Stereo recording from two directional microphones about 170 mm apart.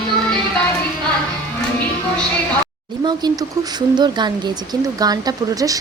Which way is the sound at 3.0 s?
25° right (ahead or behind).